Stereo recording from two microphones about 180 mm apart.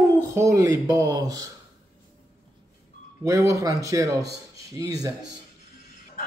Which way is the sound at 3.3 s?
20° right (ahead or behind).